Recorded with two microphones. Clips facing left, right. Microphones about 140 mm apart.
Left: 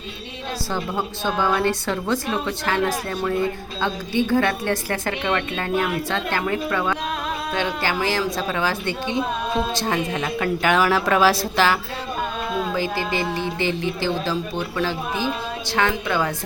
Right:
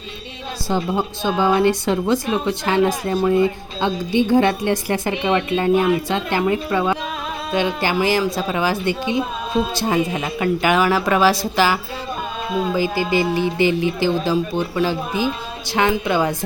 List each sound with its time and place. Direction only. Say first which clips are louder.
0.7 s a woman's voice: right 7 dB; 15° right (ahead or behind)